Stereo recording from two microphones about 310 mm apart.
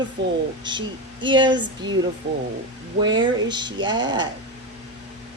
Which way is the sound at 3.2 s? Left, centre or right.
Centre.